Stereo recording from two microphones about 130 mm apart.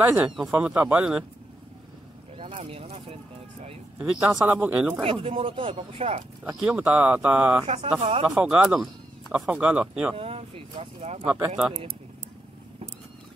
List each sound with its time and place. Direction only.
0.0 s speech: 15° right (ahead or behind)
2.3 s a sound: 45° right (ahead or behind)
4.0 s speech: 5° right (ahead or behind)
5.0 s speech: 45° right (ahead or behind)
6.6 s speech: 10° right (ahead or behind)
7.6 s speech: 50° right (ahead or behind)
8.4 s speech: 10° right (ahead or behind)
10.1 s speech: 45° right (ahead or behind)
11.2 s speech: 15° right (ahead or behind)